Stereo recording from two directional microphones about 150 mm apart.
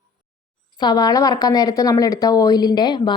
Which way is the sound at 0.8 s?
25° left (ahead or behind).